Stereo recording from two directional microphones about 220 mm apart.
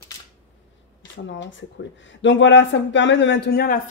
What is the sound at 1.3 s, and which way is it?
Speech, 55° left (ahead or behind).